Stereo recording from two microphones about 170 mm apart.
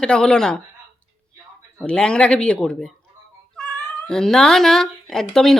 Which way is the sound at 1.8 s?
5° left (ahead or behind).